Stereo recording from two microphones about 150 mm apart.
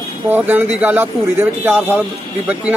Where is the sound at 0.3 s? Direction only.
10° right (ahead or behind).